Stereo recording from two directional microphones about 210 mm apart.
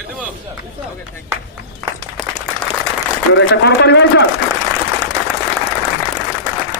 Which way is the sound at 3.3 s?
55° left (ahead or behind).